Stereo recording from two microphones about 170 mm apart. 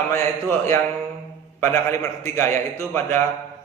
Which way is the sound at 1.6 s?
15° left (ahead or behind).